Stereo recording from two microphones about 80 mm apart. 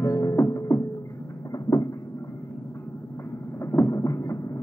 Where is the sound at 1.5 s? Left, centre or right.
Left.